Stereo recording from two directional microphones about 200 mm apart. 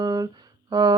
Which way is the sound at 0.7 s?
20° right (ahead or behind).